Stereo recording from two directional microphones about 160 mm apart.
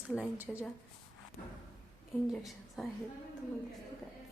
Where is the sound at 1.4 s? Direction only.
45° left (ahead or behind).